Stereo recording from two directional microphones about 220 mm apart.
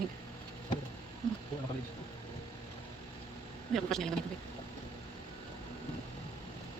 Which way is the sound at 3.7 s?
Centre (ahead or behind).